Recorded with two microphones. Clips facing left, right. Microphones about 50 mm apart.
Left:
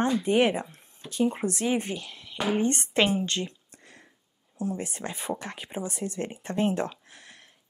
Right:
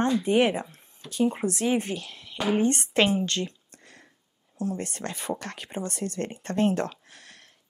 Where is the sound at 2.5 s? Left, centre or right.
Centre.